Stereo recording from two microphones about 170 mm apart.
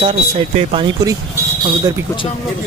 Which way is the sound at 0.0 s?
35° right (ahead or behind).